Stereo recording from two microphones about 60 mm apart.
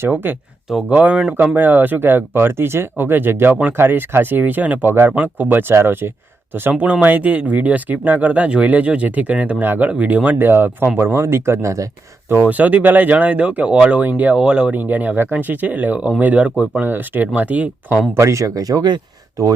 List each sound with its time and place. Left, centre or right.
0.1 s speech: right
0.9 s speech: right
10.3 s speech: right
12.5 s speech: right
14.8 s speech: right
18.2 s speech: right